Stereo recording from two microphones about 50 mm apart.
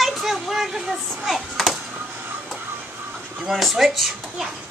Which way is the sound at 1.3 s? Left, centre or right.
Centre.